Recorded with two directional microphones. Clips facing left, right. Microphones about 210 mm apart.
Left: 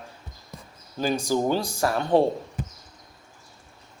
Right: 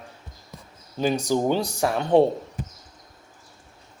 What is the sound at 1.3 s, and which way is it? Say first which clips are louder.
Speech: even; 20° right (ahead or behind).